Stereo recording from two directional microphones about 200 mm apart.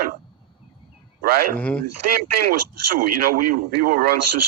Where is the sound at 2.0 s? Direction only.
50° right (ahead or behind).